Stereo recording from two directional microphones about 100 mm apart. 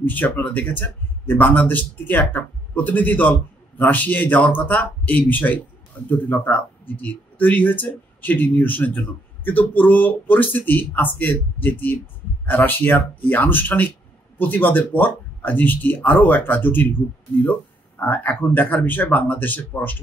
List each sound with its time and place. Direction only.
0.0 s speech: 15° left (ahead or behind)